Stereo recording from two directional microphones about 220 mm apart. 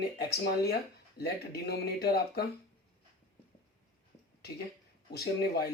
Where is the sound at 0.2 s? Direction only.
45° left (ahead or behind).